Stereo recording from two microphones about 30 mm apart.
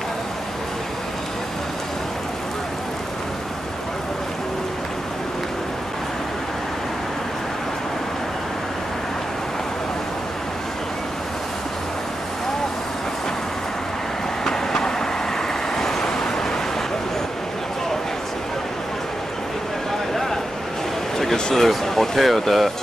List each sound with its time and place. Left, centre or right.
14.4 s vehicle: centre
16.0 s vehicle: left
21.5 s a sound: centre